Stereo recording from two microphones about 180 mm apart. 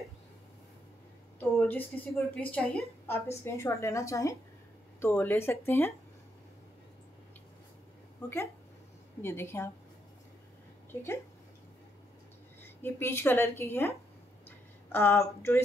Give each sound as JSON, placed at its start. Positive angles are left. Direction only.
{"t": 1.4, "sound": "a sound", "side_deg": 10}
{"t": 2.3, "sound": "a woman's voice", "side_deg": 5}
{"t": 8.2, "sound": "a woman's voice", "side_deg": 15}
{"t": 10.9, "sound": "speech", "side_deg": 15}
{"t": 12.8, "sound": "a woman's voice", "side_deg": 15}